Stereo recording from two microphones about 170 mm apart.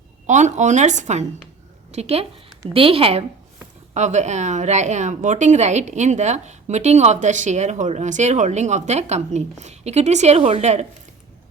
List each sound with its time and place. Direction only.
0.3 s a woman's voice: 45° right (ahead or behind)